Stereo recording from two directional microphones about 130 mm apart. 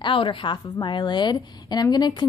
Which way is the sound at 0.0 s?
40° left (ahead or behind).